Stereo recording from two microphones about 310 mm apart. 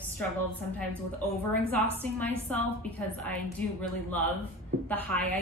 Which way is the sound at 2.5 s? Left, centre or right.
Centre.